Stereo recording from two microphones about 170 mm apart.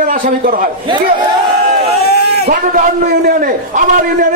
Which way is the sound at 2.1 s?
70° left (ahead or behind).